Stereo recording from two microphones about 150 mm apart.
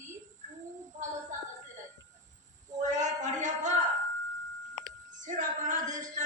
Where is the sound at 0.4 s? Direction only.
55° right (ahead or behind).